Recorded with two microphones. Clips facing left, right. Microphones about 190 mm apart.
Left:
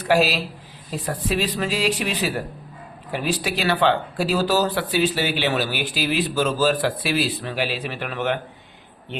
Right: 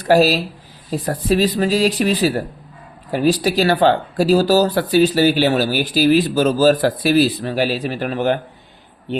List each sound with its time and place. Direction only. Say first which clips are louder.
0.0 s speech: right 6 dB; 40° right (ahead or behind)